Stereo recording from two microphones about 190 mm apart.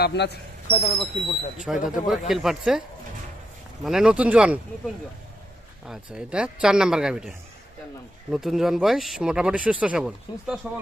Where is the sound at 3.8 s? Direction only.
5° right (ahead or behind).